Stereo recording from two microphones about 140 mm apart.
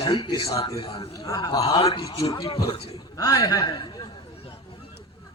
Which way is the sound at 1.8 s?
40° left (ahead or behind).